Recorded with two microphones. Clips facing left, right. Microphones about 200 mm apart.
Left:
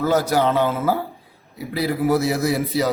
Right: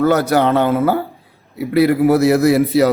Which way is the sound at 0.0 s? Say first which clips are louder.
Right 5 dB; 65° right (ahead or behind).